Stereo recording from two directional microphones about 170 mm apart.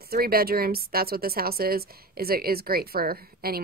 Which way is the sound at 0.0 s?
65° right (ahead or behind).